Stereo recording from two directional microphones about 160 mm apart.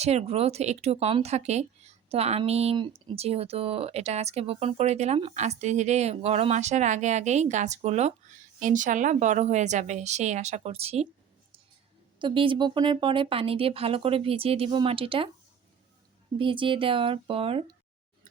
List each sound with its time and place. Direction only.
0.0 s speech: 40° right (ahead or behind)
12.2 s speech: 30° right (ahead or behind)
16.4 s speech: 30° right (ahead or behind)